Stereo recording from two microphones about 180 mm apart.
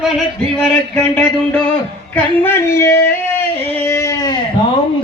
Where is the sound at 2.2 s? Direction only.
10° left (ahead or behind).